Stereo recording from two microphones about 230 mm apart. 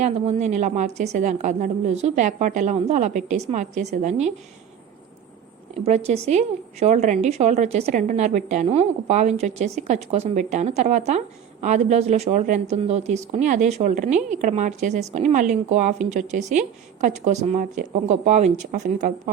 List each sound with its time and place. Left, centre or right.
0.0 s speech: right
5.8 s a woman's voice: right